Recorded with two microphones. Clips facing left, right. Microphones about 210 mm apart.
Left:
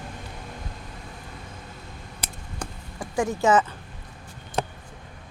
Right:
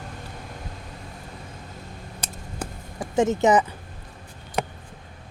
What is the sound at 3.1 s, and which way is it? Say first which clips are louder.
Speech: right 2 dB; 20° right (ahead or behind).